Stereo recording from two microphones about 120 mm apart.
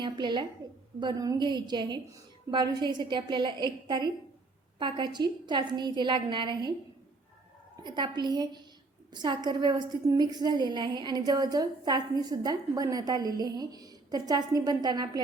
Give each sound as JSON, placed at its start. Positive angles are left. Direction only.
{"t": 0.0, "sound": "a woman's voice", "side_deg": -40}
{"t": 7.9, "sound": "a woman's voice", "side_deg": -40}